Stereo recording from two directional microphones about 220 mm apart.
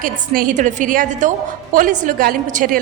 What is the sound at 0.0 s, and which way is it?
A woman's voice, 40° right (ahead or behind).